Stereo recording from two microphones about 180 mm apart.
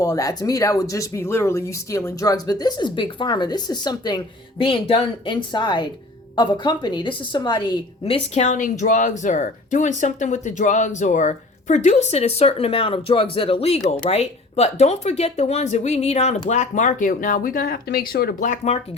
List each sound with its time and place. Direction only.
0.0 s speech: 20° left (ahead or behind); by 18.8 s 40° left (ahead or behind)